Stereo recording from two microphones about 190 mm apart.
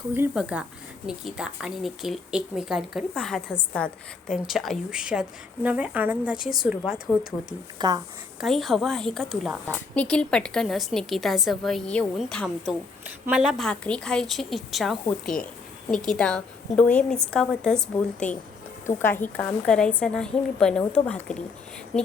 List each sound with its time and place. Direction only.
0.1 s a woman's voice: 10° right (ahead or behind)
7.8 s speech: 20° right (ahead or behind)
8.4 s a woman's voice: centre (ahead or behind)
16.0 s a woman's voice: 5° left (ahead or behind)